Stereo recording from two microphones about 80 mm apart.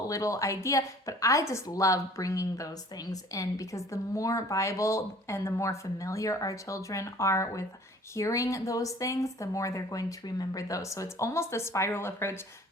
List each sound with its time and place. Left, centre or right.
0.1 s speech: left